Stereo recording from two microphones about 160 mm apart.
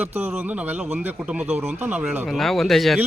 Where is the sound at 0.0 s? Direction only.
15° right (ahead or behind).